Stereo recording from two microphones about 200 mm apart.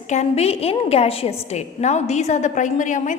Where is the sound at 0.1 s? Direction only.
35° left (ahead or behind).